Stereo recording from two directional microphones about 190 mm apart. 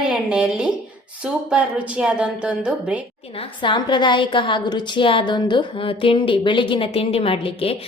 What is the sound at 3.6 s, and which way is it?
A woman's voice, 25° left (ahead or behind).